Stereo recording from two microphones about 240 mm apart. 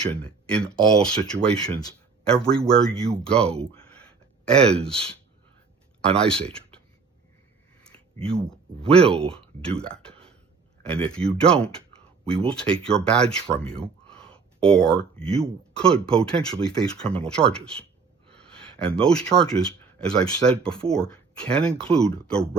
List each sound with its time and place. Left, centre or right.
0.1 s speech: centre
6.1 s speech: centre
8.9 s speech: centre
13.7 s a sound: centre
15.7 s speech: centre
21.9 s speech: right